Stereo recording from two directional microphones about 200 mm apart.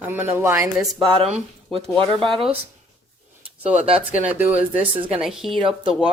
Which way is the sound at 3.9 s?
30° right (ahead or behind).